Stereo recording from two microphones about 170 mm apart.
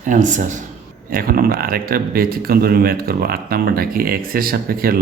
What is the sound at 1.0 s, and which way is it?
A man's voice, 60° right (ahead or behind).